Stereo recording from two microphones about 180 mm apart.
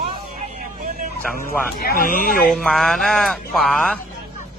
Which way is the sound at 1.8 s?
55° left (ahead or behind).